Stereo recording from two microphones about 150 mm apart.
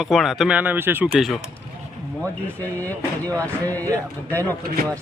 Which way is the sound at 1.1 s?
Centre (ahead or behind).